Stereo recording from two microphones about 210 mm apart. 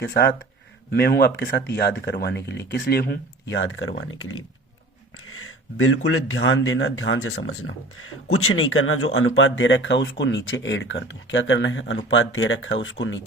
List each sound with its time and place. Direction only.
0.0 s speech: 50° left (ahead or behind); by 4.4 s 70° left (ahead or behind)
5.2 s a sound: 80° left
6.1 s speech: 75° left (ahead or behind)
8.0 s speech: 90° left; by 13.2 s 65° left (ahead or behind)